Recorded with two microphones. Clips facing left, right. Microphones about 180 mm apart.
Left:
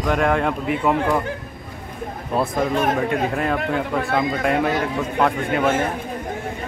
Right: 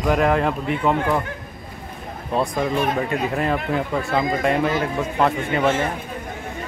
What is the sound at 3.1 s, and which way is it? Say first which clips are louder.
Speech: left 1 dB; centre (ahead or behind).